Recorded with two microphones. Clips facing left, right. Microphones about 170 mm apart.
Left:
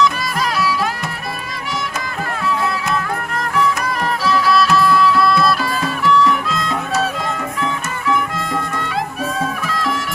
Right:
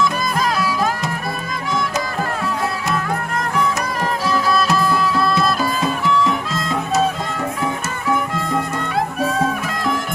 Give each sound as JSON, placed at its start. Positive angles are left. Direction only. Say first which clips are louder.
{"t": 4.3, "sound": "music", "louder": "left 3 dB", "side_deg": -45}